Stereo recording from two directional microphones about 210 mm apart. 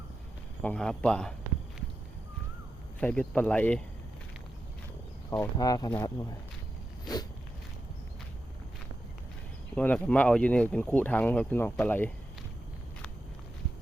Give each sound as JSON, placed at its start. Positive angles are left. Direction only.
{"t": 0.6, "sound": "speech", "side_deg": 5}
{"t": 3.0, "sound": "speech", "side_deg": 5}
{"t": 5.5, "sound": "speech", "side_deg": 20}
{"t": 9.7, "sound": "speech", "side_deg": 5}